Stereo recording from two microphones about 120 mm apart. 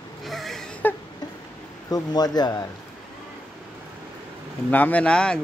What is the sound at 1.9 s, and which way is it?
Speech, 35° left (ahead or behind).